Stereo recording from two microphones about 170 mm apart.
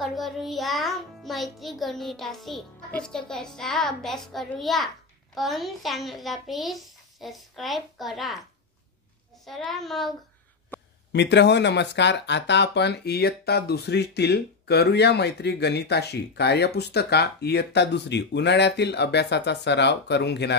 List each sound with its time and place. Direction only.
0.0 s a child's voice: centre (ahead or behind)
9.4 s a child's voice: centre (ahead or behind)
11.1 s speech: 90° left